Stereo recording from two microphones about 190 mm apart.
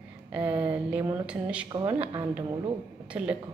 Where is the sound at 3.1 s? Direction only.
10° right (ahead or behind).